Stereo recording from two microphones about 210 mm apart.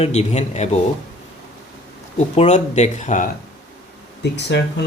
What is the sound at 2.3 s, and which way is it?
Speech, 30° left (ahead or behind).